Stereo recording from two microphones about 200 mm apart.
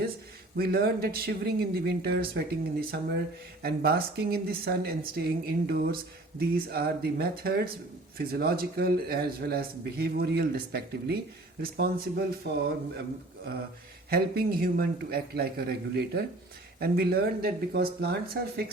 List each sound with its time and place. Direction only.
0.5 s speech: 50° right (ahead or behind)
14.1 s speech: 50° right (ahead or behind)